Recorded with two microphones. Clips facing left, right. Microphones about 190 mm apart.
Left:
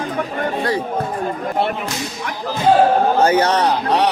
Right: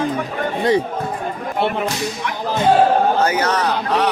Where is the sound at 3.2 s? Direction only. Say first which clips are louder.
Left 3 dB; 30° left (ahead or behind).